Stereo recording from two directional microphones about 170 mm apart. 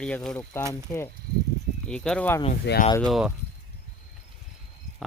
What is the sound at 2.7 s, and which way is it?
Speech, 90° left.